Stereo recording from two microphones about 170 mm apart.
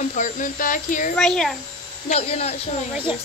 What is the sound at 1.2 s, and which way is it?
Speech, 5° left (ahead or behind).